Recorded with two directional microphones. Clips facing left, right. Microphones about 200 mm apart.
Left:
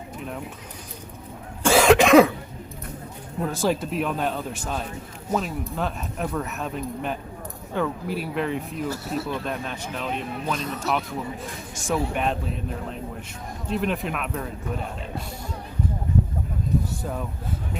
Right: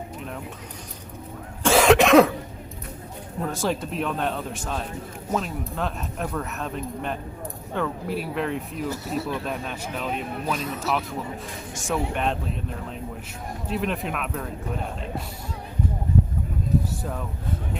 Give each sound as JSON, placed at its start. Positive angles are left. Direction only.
{"t": 1.6, "sound": "cough", "side_deg": 0}
{"t": 3.4, "sound": "speech", "side_deg": 0}
{"t": 17.0, "sound": "speech", "side_deg": 5}